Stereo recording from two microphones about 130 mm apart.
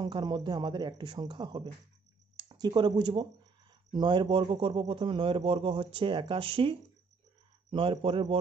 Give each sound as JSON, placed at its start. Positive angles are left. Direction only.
{"t": 0.0, "sound": "a man's voice", "side_deg": -35}